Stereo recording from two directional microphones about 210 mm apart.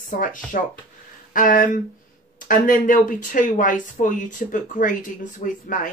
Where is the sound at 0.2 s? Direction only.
40° left (ahead or behind).